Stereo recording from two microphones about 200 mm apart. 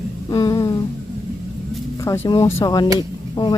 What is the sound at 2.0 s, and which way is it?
Speech, 15° left (ahead or behind).